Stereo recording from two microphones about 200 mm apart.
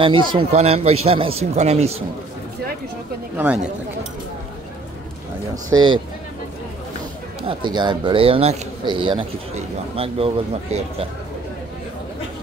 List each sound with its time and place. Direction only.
0.0 s speech: 25° right (ahead or behind)
5.7 s speech: 25° right (ahead or behind)
7.4 s speech: 25° right (ahead or behind)